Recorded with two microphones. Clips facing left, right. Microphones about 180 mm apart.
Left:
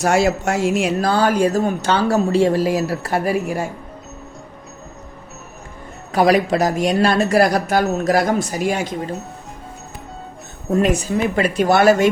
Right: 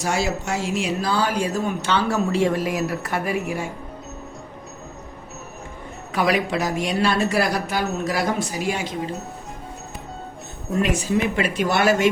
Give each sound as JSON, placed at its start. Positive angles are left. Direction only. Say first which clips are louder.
{"t": 0.0, "sound": "speech", "louder": "left 7 dB", "side_deg": 55}
{"t": 6.1, "sound": "speech", "louder": "left 6 dB", "side_deg": 40}
{"t": 11.2, "sound": "speech", "louder": "left 4 dB", "side_deg": 35}